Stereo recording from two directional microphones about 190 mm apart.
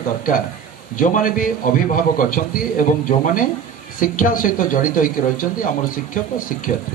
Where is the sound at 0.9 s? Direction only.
45° left (ahead or behind).